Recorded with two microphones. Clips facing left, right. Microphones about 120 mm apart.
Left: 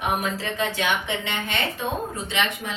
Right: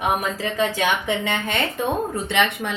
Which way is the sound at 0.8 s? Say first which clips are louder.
Right 4 dB; 45° right (ahead or behind).